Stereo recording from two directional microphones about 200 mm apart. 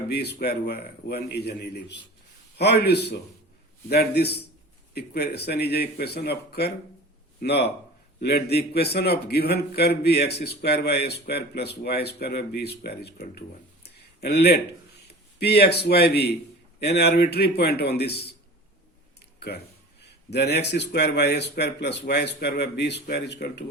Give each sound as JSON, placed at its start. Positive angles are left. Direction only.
{"t": 0.1, "sound": "a man's voice", "side_deg": 55}
{"t": 13.8, "sound": "a sound", "side_deg": 55}
{"t": 15.4, "sound": "a man's voice", "side_deg": 55}
{"t": 19.4, "sound": "a man's voice", "side_deg": 55}